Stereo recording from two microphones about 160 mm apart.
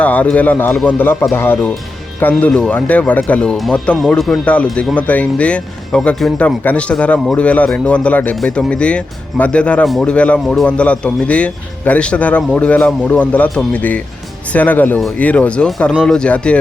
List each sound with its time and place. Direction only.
0.0 s speech: 10° left (ahead or behind)